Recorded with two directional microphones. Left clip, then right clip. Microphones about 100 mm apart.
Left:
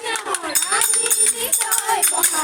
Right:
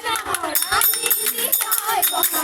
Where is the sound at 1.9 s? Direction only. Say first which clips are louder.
Even; 15° right (ahead or behind).